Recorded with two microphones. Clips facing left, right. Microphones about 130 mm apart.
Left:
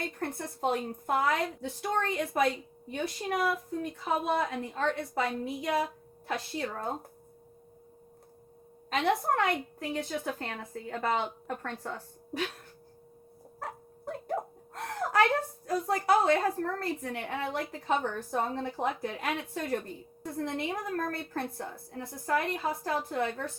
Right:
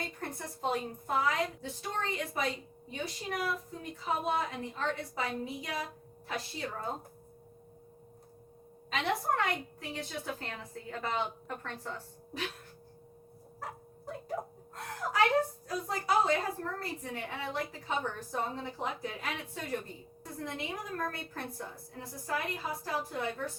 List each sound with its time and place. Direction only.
0.0 s a woman's voice: 55° left (ahead or behind)
8.9 s a woman's voice: 50° left (ahead or behind)
13.6 s dog: 60° left (ahead or behind)
15.6 s a woman's voice: 55° left (ahead or behind)